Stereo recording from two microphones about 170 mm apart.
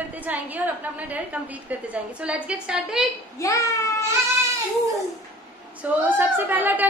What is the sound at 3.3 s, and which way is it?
Speech, 15° left (ahead or behind).